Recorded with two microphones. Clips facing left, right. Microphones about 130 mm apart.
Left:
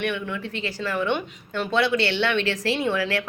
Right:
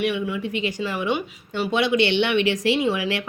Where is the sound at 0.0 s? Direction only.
10° right (ahead or behind).